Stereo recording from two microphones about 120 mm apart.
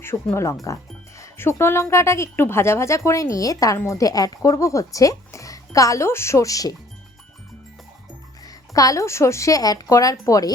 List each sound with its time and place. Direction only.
0.0 s speech: 20° left (ahead or behind)
8.4 s speech: 30° left (ahead or behind)